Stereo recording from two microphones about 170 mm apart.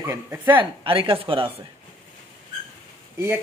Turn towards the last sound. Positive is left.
turn(degrees=-15)  # may be behind; listen again after turning